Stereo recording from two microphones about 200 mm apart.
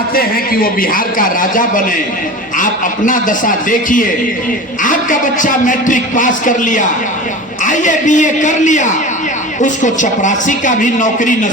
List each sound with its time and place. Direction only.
0.1 s a man's voice: 45° left (ahead or behind)
3.1 s a man's voice: 40° left (ahead or behind)